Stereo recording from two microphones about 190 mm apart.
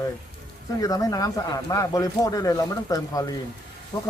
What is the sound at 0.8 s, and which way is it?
Speech, 20° left (ahead or behind).